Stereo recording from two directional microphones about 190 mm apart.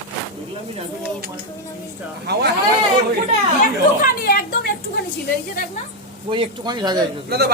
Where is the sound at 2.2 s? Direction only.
60° right (ahead or behind).